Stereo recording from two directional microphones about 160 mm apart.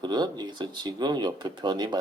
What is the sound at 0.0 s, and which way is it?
Speech, 25° right (ahead or behind).